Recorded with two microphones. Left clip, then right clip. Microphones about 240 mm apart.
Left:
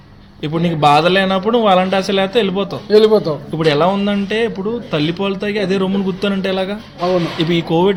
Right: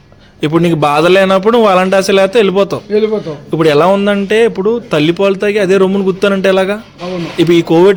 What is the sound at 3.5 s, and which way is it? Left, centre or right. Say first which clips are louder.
Speech: right 6 dB; right.